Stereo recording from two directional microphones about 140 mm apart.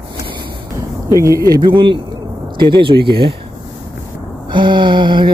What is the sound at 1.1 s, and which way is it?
Speech, 20° right (ahead or behind).